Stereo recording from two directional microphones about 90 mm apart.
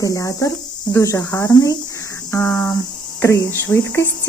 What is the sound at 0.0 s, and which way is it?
Speech, 40° left (ahead or behind).